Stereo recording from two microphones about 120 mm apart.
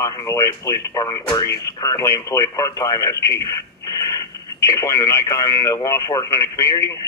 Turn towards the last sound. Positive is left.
turn(degrees=25)  # may be behind; listen again after turning